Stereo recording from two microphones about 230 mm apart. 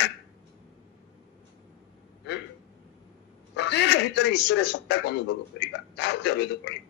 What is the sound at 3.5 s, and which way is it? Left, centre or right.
A man's voice, left.